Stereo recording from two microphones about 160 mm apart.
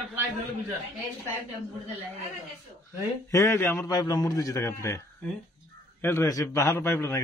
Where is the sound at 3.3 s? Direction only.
20° left (ahead or behind).